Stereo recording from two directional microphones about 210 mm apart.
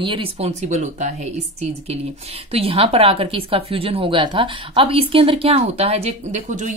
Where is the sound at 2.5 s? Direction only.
25° right (ahead or behind).